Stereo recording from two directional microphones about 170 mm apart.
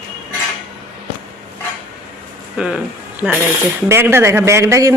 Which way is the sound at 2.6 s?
5° right (ahead or behind).